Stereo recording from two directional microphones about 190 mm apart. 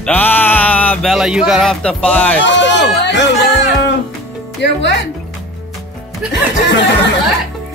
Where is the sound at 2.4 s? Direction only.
65° left (ahead or behind).